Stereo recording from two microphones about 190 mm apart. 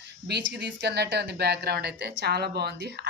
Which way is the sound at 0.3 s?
60° right (ahead or behind).